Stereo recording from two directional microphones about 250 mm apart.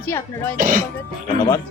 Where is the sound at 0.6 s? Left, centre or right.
Right.